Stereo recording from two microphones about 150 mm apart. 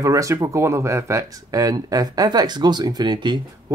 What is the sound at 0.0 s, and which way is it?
Speech, 20° right (ahead or behind).